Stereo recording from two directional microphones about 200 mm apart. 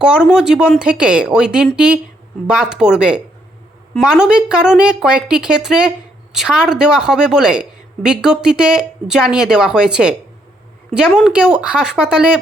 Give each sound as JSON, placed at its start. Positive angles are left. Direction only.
{"t": 0.0, "sound": "a woman's voice", "side_deg": -5}